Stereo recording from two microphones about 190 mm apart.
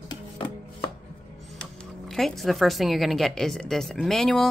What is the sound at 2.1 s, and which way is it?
A woman's voice, centre (ahead or behind).